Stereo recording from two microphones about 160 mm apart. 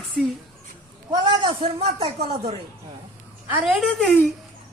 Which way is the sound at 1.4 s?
40° right (ahead or behind).